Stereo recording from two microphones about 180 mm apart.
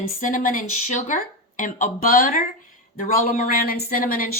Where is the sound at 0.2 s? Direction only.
45° left (ahead or behind).